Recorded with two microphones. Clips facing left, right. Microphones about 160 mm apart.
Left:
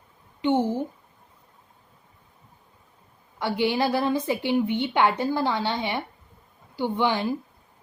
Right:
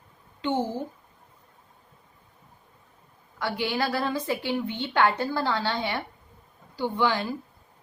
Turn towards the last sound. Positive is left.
turn(degrees=20)  # may be behind; listen again after turning